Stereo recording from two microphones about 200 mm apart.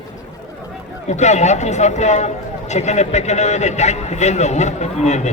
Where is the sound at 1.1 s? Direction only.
35° left (ahead or behind).